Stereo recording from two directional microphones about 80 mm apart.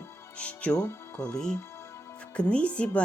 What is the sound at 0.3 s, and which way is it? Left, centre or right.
Speech, centre.